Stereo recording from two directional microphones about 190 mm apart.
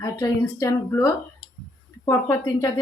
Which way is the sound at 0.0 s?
15° left (ahead or behind).